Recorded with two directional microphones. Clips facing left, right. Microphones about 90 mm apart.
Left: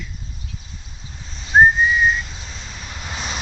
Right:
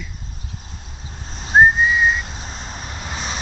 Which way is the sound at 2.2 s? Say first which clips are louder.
Right 4 dB; 40° right (ahead or behind).